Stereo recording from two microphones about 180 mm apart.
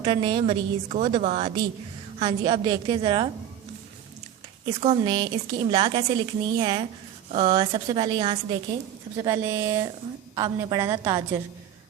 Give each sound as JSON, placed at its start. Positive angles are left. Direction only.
{"t": 0.0, "sound": "a woman's voice", "side_deg": -30}
{"t": 4.6, "sound": "a woman's voice", "side_deg": -30}
{"t": 9.1, "sound": "a woman's voice", "side_deg": -15}